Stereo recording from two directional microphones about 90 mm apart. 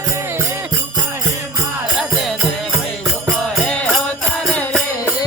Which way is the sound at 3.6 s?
15° left (ahead or behind).